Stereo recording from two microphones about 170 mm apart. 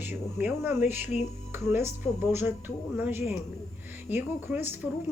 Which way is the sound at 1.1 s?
40° left (ahead or behind).